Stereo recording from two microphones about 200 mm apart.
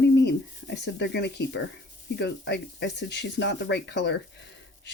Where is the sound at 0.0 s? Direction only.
60° left (ahead or behind).